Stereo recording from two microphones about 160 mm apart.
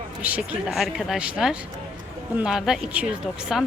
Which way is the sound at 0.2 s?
10° right (ahead or behind).